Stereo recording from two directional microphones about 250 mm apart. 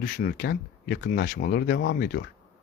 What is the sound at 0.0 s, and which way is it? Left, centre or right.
Speech, left.